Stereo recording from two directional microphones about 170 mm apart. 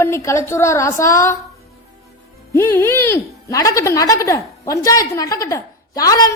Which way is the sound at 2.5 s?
15° left (ahead or behind).